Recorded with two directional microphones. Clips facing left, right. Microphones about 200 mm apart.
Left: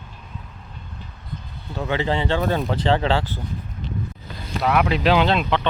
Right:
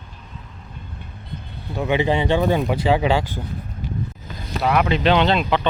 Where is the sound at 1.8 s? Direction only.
15° right (ahead or behind).